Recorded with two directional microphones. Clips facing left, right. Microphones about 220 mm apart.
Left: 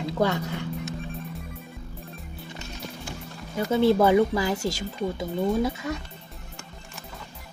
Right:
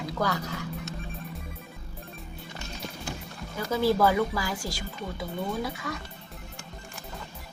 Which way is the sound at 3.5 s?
25° left (ahead or behind).